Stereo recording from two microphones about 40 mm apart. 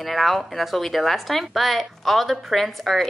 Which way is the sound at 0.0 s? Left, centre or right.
Centre.